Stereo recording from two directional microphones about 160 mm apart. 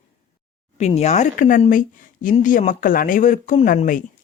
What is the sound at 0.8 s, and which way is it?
A woman's voice, 45° left (ahead or behind).